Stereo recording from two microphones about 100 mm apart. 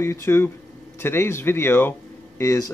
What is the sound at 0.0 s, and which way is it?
Speech, 25° left (ahead or behind).